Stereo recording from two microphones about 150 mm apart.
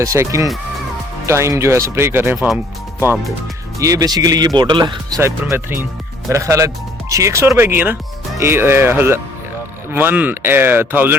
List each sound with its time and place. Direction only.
0.0 s speech: 20° right (ahead or behind)
3.8 s speech: 20° right (ahead or behind)
5.2 s speech: 15° right (ahead or behind)